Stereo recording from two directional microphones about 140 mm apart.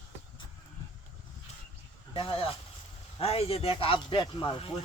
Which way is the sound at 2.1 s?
40° left (ahead or behind).